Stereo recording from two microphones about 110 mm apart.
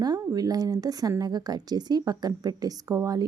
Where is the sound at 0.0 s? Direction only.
35° right (ahead or behind).